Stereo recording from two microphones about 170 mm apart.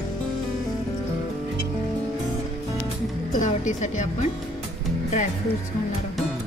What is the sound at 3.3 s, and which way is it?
Speech, 45° left (ahead or behind).